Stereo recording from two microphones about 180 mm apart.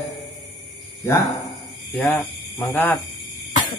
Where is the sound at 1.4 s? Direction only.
5° left (ahead or behind).